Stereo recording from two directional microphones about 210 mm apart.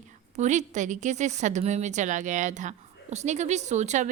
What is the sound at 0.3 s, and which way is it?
Speech, 35° right (ahead or behind).